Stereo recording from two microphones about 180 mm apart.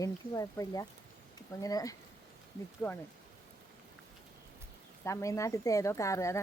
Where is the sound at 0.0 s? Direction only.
20° left (ahead or behind).